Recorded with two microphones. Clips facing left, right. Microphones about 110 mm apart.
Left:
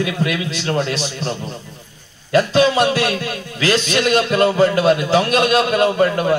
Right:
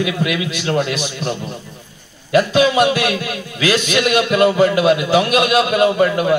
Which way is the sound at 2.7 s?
15° right (ahead or behind).